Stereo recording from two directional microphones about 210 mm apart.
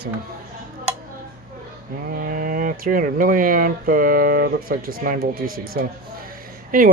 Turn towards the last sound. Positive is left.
turn(degrees=-40)  # may be behind; listen again after turning